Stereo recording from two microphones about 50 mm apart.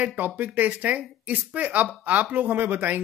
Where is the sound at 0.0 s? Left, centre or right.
Right.